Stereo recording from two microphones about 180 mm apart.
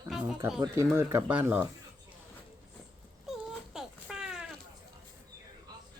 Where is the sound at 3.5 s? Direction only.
5° right (ahead or behind).